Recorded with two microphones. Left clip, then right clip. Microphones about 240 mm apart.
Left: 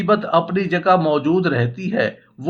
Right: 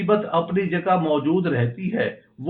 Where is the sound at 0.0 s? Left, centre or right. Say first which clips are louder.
Left 4 dB; left.